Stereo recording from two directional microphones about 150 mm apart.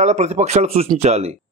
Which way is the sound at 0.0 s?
50° right (ahead or behind).